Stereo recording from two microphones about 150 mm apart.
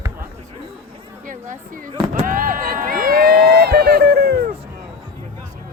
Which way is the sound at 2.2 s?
70° right (ahead or behind).